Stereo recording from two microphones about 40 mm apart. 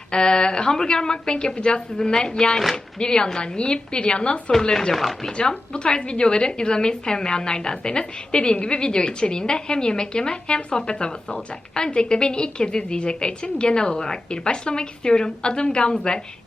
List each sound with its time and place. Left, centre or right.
0.1 s a woman's voice: left
4.7 s speech: centre
5.4 s a woman's voice: left